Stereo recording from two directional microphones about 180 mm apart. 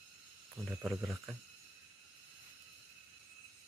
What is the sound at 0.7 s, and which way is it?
Speech, 5° right (ahead or behind).